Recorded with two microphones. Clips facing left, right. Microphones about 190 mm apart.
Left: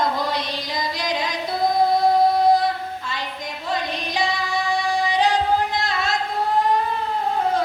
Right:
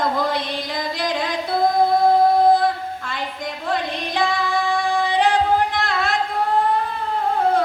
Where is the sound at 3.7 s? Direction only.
55° right (ahead or behind).